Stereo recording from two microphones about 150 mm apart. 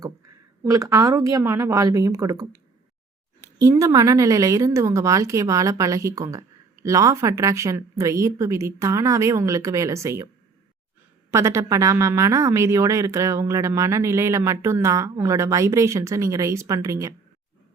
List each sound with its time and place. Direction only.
0.6 s speech: 20° right (ahead or behind)
3.6 s speech: 20° right (ahead or behind)
11.3 s speech: 20° right (ahead or behind)